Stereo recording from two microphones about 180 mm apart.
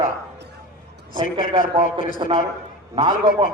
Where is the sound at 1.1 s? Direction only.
30° right (ahead or behind).